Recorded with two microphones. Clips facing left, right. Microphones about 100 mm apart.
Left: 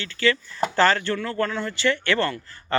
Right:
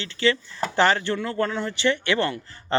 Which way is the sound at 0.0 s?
25° right (ahead or behind).